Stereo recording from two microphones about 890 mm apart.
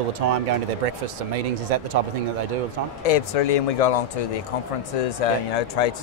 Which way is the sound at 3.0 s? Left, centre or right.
Left.